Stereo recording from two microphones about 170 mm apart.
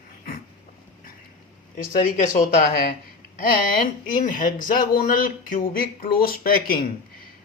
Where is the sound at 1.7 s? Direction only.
45° left (ahead or behind).